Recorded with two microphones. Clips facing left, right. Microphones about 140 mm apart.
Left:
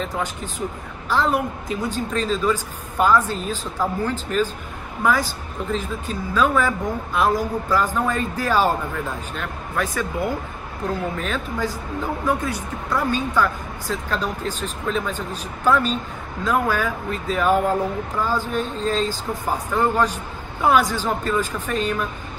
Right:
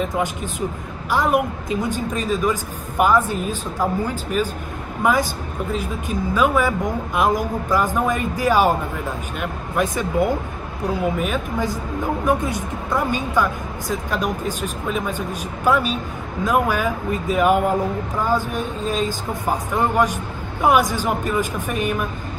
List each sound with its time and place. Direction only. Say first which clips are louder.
0.0 s speech: right 4 dB; 15° right (ahead or behind)